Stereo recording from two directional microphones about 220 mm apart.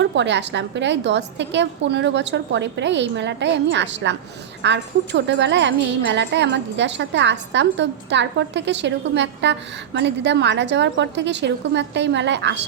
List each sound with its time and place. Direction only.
0.0 s a woman's voice: 55° right (ahead or behind)